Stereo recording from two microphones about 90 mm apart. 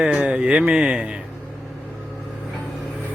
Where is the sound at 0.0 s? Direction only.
15° right (ahead or behind).